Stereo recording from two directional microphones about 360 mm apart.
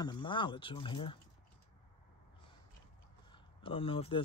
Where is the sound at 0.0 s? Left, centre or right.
Centre.